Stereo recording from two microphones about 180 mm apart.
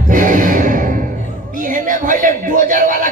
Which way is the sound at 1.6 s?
50° right (ahead or behind).